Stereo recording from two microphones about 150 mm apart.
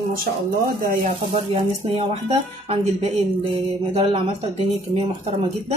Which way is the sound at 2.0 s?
45° right (ahead or behind).